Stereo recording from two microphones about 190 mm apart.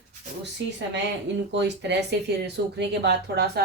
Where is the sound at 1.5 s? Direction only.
65° right (ahead or behind).